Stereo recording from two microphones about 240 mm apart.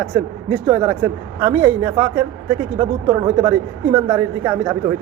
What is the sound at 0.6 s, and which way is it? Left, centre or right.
A man's voice, centre.